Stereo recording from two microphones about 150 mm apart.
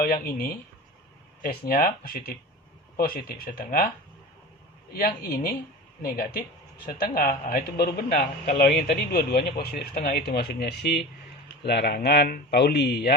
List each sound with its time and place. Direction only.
0.0 s speech: 70° left (ahead or behind)
6.1 s a man's voice: 65° left (ahead or behind); by 13.1 s 90° left